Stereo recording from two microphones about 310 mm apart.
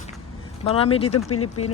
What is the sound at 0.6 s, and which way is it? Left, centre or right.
Speech, centre.